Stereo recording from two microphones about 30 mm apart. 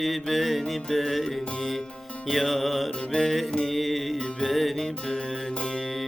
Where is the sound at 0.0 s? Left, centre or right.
Centre.